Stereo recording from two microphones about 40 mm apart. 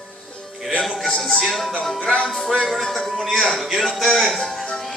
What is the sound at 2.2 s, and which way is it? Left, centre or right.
Music, centre.